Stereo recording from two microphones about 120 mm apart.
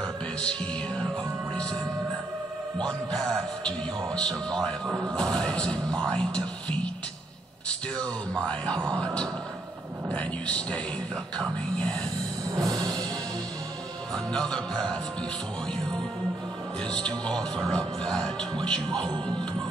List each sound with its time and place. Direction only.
0.0 s music: 10° left (ahead or behind)
3.6 s speech: 5° left (ahead or behind)
8.0 s speech: 10° left (ahead or behind)
12.4 s music: 30° right (ahead or behind)
14.1 s speech: 5° left (ahead or behind)
16.8 s speech: 5° left (ahead or behind)